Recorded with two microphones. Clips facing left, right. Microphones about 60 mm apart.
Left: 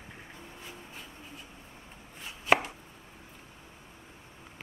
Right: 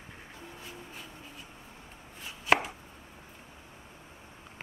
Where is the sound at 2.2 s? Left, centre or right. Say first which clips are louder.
Even; centre.